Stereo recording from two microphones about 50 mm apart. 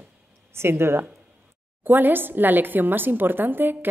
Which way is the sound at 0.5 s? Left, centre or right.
Right.